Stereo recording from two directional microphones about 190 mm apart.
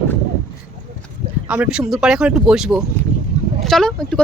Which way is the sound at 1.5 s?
5° right (ahead or behind).